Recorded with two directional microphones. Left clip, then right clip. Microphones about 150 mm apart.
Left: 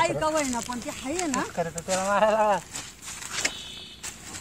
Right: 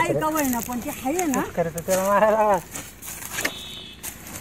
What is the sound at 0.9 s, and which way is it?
Speech, 60° right (ahead or behind).